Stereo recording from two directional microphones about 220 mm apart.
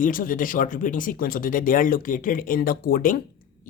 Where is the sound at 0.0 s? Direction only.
40° left (ahead or behind).